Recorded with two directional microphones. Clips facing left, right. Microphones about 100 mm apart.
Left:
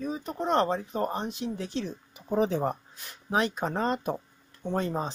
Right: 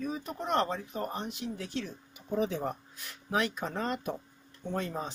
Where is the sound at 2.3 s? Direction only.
40° left (ahead or behind).